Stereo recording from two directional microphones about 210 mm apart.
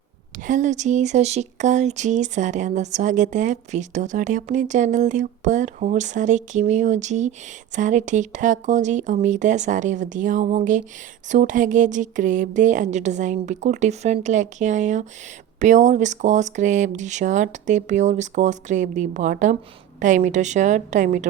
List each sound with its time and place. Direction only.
0.4 s speech: 35° right (ahead or behind)